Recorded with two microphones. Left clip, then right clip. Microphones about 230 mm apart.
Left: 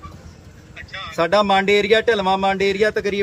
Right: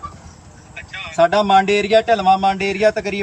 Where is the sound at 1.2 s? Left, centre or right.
Centre.